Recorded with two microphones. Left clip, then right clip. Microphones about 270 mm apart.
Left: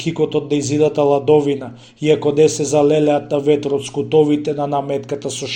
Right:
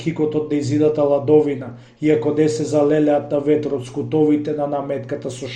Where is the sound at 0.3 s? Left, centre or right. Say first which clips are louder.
Left 2 dB; centre.